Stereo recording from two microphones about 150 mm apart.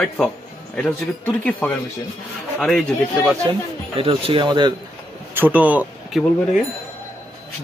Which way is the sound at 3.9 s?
40° right (ahead or behind).